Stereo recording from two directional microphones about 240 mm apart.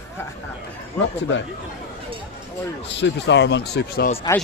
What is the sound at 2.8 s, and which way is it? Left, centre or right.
Speech, left.